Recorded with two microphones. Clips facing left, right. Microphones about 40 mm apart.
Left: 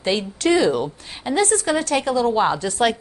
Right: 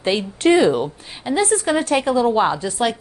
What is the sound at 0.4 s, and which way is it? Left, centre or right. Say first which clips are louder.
A woman's voice: right 4 dB; right.